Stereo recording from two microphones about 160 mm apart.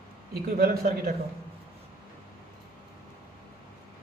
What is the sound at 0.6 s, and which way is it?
Speech, 75° right (ahead or behind).